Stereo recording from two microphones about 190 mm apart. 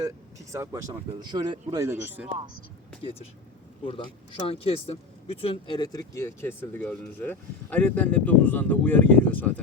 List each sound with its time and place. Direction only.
0.5 s speech: 15° right (ahead or behind)
3.8 s speech: 30° left (ahead or behind); by 9.5 s 10° left (ahead or behind)